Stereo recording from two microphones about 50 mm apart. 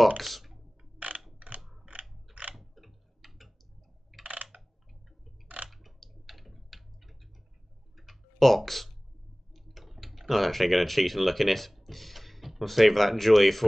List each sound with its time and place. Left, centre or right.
0.2 s speech: centre
0.9 s mechanisms: right
1.6 s mechanisms: centre
2.5 s tick-tock: centre
4.2 s coin: right
5.7 s computer keyboard: centre
7.9 s clicking: centre
9.5 s speech: centre